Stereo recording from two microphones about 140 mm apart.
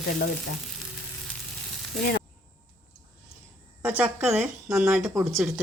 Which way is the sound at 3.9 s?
10° right (ahead or behind).